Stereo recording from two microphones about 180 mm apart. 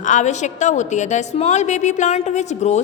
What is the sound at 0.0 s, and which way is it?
A woman's voice, 40° left (ahead or behind).